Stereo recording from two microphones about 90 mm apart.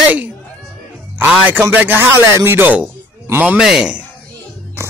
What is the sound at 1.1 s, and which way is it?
Speech, 20° right (ahead or behind).